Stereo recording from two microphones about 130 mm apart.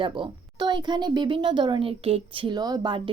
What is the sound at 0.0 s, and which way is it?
Speech, 40° right (ahead or behind).